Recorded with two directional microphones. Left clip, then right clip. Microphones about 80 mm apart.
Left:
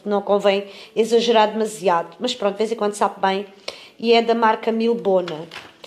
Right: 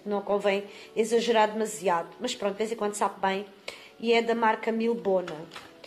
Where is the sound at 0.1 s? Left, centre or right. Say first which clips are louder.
Left 9 dB; left.